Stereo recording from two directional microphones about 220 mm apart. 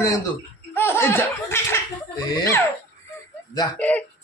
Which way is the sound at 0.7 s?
10° left (ahead or behind).